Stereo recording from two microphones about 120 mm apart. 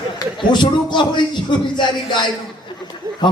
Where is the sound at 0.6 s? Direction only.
40° left (ahead or behind).